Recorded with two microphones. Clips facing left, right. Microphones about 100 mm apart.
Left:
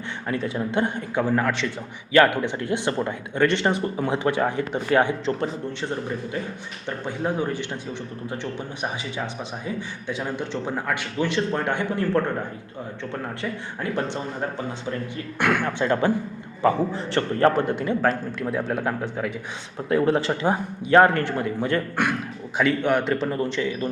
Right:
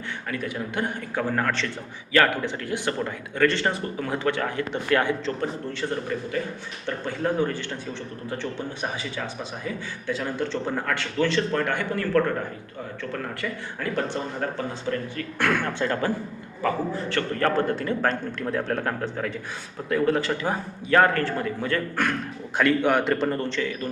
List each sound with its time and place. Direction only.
0.3 s speech: 25° left (ahead or behind)
6.8 s speech: 15° left (ahead or behind)
15.1 s speech: 10° left (ahead or behind)
18.1 s speech: 5° left (ahead or behind)
19.9 s speech: 25° left (ahead or behind)
22.5 s speech: centre (ahead or behind); by 23.9 s 20° left (ahead or behind)